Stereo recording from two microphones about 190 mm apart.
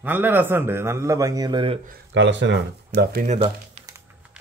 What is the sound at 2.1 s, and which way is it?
Speech, 70° right (ahead or behind).